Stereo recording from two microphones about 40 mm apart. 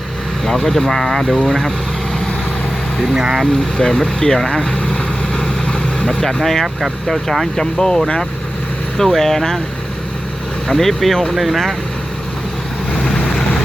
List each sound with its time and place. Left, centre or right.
0.4 s speech: centre
3.2 s speech: centre
3.4 s speech: centre
4.8 s vehicle: centre
7.1 s speech: centre
7.5 s speech: centre
10.7 s speech: centre
12.9 s vehicle: centre